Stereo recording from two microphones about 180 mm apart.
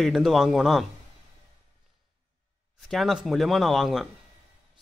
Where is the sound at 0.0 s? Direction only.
Centre (ahead or behind).